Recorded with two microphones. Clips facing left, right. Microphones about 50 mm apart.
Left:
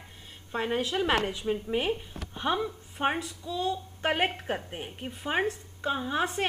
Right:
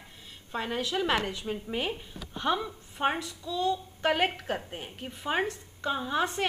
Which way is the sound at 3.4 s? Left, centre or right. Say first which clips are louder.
Right 2 dB; centre.